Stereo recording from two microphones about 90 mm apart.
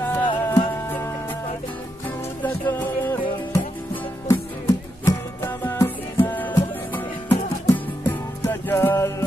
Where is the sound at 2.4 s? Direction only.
20° left (ahead or behind).